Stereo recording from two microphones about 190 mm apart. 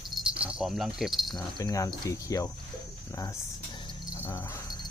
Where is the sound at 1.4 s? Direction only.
20° left (ahead or behind).